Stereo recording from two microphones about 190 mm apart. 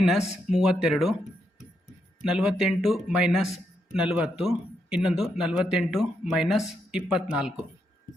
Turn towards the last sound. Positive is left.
turn(degrees=-5)  # may be behind; listen again after turning